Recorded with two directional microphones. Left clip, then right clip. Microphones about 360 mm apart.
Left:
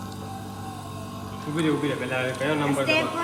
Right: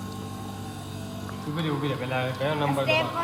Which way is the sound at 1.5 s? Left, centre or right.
Right.